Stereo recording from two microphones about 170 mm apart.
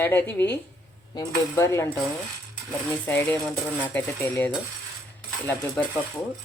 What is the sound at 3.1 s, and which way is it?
Speech, 15° left (ahead or behind).